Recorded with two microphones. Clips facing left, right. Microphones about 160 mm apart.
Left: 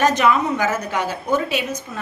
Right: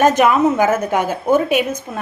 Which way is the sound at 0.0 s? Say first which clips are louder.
Right 4 dB; 50° right (ahead or behind).